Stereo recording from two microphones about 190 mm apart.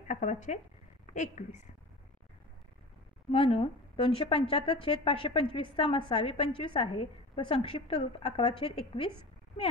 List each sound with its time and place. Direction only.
0.1 s a woman's voice: 40° left (ahead or behind)
3.3 s a woman's voice: 30° left (ahead or behind)